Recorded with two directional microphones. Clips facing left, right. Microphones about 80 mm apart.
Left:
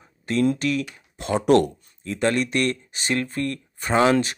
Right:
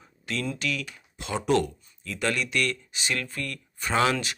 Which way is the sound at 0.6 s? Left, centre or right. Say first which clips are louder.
Left 7 dB; left.